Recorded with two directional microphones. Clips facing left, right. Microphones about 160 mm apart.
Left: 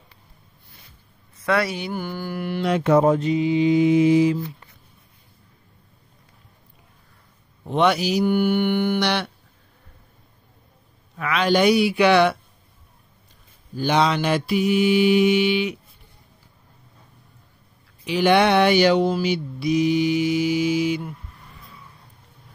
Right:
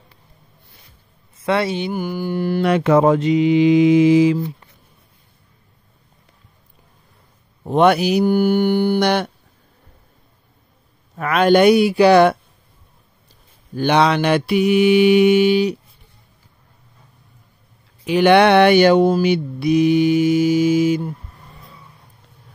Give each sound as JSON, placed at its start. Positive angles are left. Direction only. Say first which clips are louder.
{"t": 1.4, "sound": "speech", "louder": "right 3 dB", "side_deg": -25}
{"t": 2.3, "sound": "music", "louder": "right 8 dB", "side_deg": -35}
{"t": 2.6, "sound": "mantra", "louder": "right 3 dB", "side_deg": -80}
{"t": 7.6, "sound": "mantra", "louder": "right 5 dB", "side_deg": -50}
{"t": 8.3, "sound": "music", "louder": "right 3 dB", "side_deg": -40}
{"t": 11.1, "sound": "mantra", "louder": "right 6 dB", "side_deg": -50}
{"t": 11.9, "sound": "music", "louder": "right 5 dB", "side_deg": -40}
{"t": 13.7, "sound": "mantra", "louder": "right 4 dB", "side_deg": -65}
{"t": 18.0, "sound": "mantra", "louder": "right 5 dB", "side_deg": -60}